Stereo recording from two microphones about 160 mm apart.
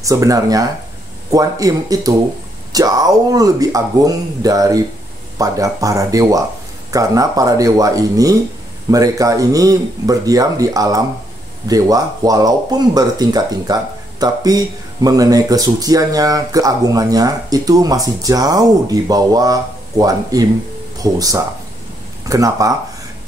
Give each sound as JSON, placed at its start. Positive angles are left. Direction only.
{"t": 0.0, "sound": "speech", "side_deg": -20}